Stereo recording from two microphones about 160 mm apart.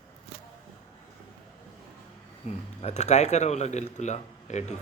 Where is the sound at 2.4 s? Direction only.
45° left (ahead or behind).